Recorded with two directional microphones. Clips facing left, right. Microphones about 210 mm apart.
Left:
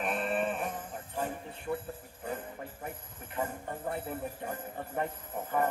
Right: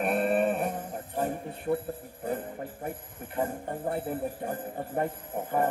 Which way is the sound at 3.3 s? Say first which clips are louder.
Right 5 dB; 35° right (ahead or behind).